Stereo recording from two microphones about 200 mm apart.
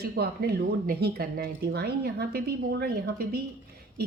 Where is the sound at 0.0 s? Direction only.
50° right (ahead or behind).